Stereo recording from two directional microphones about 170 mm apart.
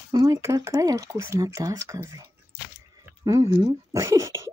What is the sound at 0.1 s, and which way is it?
Speech, 20° right (ahead or behind).